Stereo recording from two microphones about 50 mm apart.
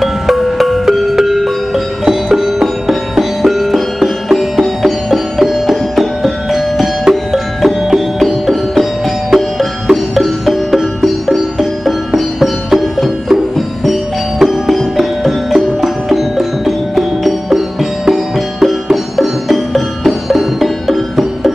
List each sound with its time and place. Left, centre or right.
0.0 s music: centre